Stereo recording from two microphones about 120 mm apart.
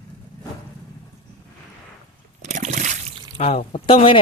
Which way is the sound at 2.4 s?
85° right.